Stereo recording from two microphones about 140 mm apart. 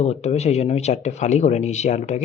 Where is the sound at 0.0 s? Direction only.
50° left (ahead or behind).